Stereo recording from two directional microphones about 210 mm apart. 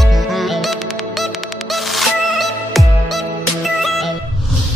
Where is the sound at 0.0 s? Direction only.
Centre (ahead or behind).